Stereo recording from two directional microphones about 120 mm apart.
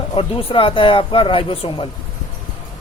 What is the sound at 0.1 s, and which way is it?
A woman's voice, 50° left (ahead or behind).